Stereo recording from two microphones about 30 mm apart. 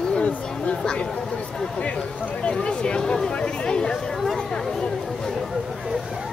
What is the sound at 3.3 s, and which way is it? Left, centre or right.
Chatter, left.